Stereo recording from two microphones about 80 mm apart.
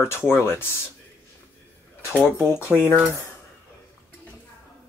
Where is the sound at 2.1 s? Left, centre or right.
Left.